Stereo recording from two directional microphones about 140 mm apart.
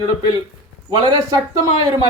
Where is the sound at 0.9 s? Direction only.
35° right (ahead or behind).